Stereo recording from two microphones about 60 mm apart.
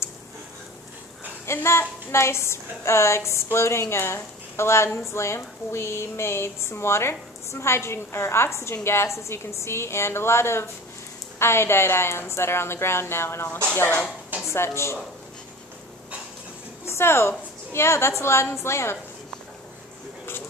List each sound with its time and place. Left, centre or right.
1.4 s a woman's voice: left
14.5 s a woman's voice: left
16.8 s a woman's voice: left